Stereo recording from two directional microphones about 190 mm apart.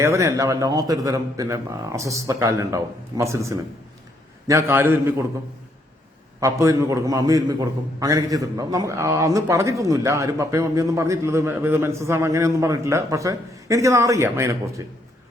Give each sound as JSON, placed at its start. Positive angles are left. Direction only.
{"t": 0.0, "sound": "a man's voice", "side_deg": -15}
{"t": 6.4, "sound": "a man's voice", "side_deg": -15}